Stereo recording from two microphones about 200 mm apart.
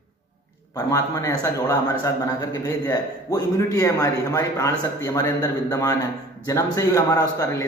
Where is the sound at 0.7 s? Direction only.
15° left (ahead or behind).